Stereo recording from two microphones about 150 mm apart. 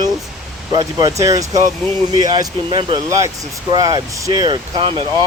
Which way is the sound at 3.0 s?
20° right (ahead or behind).